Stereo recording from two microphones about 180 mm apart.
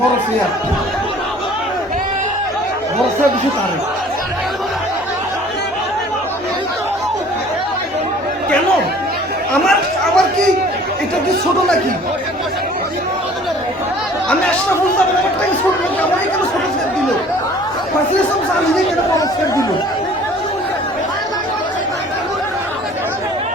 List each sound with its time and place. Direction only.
9.5 s chatter: 5° left (ahead or behind)